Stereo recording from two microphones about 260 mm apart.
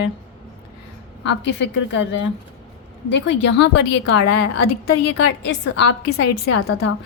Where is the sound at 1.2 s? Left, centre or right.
Left.